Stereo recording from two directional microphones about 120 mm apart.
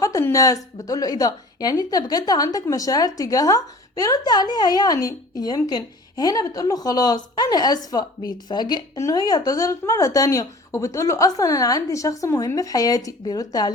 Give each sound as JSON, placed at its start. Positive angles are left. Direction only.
{"t": 0.0, "sound": "a woman's voice", "side_deg": 25}